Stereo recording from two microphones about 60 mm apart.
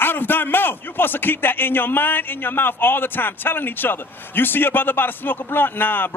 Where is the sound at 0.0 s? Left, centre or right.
Left.